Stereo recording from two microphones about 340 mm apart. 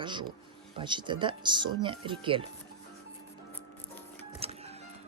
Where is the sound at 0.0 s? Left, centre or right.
Centre.